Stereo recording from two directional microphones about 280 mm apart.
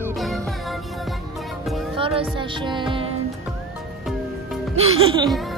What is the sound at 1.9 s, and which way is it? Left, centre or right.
Music, centre.